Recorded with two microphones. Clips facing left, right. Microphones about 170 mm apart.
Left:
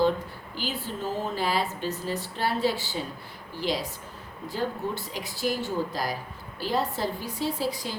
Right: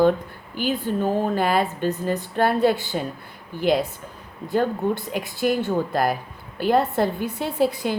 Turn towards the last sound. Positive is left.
turn(degrees=-60)  # may be behind; listen again after turning